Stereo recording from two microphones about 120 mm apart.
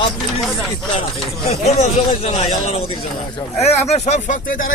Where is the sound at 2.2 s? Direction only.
55° left (ahead or behind); by 4.6 s 80° left.